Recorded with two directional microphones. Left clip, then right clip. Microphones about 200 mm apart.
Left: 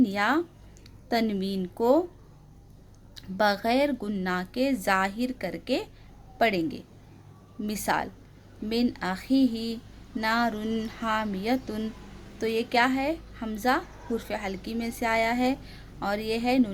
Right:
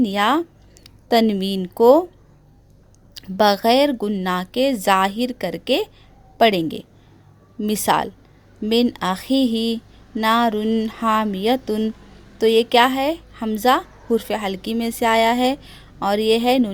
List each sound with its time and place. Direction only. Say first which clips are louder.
0.0 s a woman's voice: right 7 dB; 40° right (ahead or behind)
3.2 s a woman's voice: right 8 dB; 45° right (ahead or behind)